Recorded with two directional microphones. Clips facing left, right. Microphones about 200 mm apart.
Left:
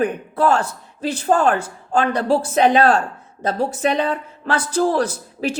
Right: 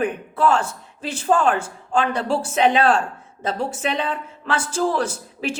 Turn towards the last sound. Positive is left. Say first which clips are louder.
# left 3 dB
turn(degrees=40)  # may be behind; listen again after turning